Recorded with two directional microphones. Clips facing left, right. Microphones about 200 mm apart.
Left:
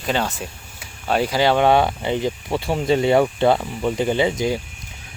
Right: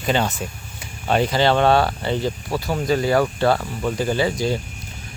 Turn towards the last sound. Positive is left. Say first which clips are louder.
# left 1 dB
turn(degrees=15)  # may be behind; listen again after turning